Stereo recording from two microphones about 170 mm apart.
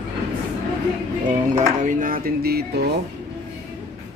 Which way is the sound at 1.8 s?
50° right (ahead or behind).